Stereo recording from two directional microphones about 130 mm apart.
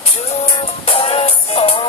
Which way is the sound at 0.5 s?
45° left (ahead or behind).